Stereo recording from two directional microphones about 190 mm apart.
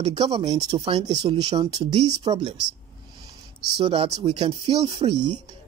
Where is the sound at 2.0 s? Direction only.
35° right (ahead or behind).